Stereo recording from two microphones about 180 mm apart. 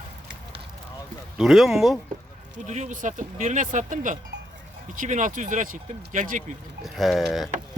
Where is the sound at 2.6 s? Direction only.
40° right (ahead or behind).